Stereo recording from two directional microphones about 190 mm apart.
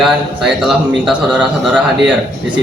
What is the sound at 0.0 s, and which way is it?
A man's voice, centre (ahead or behind).